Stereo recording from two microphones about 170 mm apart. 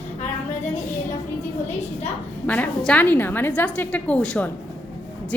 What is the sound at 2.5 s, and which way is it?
A woman's voice, 10° left (ahead or behind).